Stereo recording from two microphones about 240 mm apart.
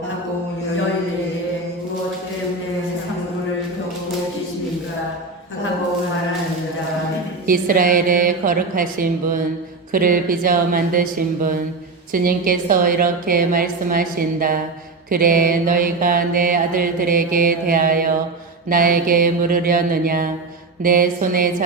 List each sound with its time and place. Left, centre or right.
7.4 s mantra: right